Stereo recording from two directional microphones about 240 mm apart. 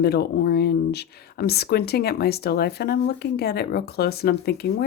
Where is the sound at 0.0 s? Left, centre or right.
Left.